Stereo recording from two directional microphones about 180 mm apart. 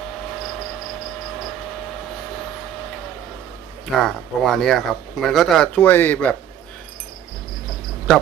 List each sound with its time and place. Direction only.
3.8 s speech: centre (ahead or behind)